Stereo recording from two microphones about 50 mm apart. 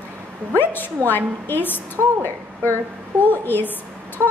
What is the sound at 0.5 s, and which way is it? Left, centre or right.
A woman's voice, left.